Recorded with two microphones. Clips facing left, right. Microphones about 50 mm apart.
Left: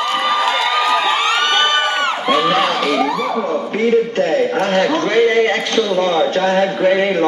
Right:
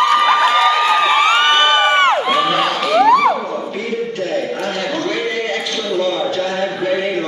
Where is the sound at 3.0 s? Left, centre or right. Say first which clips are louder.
Right 7 dB; right.